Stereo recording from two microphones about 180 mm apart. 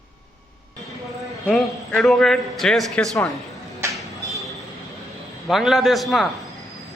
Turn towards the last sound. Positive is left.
turn(degrees=0)  # may be behind; listen again after turning